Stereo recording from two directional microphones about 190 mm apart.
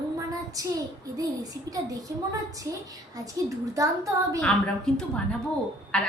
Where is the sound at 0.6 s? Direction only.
20° right (ahead or behind).